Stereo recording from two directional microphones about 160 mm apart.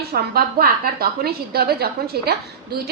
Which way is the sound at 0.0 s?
75° right (ahead or behind).